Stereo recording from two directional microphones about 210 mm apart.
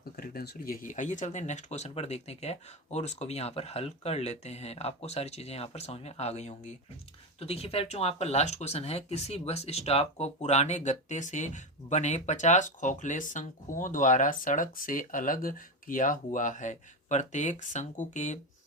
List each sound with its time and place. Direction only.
0.2 s speech: 45° left (ahead or behind)